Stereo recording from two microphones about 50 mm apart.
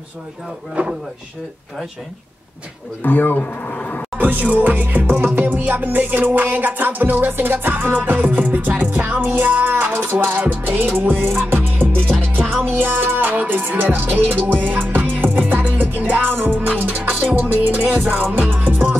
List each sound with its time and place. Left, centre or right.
0.8 s speech: right
3.0 s speech: left
4.2 s music: right